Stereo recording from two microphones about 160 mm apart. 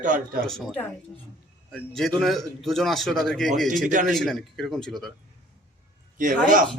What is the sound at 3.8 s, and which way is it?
Speech, 55° right (ahead or behind).